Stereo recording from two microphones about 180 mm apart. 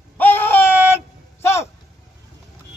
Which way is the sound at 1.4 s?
15° left (ahead or behind).